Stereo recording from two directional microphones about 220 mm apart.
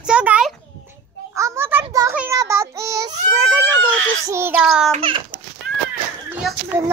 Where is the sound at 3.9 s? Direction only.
65° right (ahead or behind).